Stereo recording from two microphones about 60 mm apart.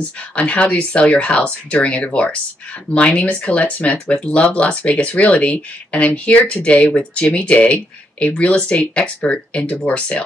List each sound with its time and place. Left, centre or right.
0.4 s speech: left